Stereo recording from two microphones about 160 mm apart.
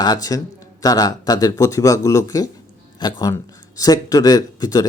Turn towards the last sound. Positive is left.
turn(degrees=25)  # may be behind; listen again after turning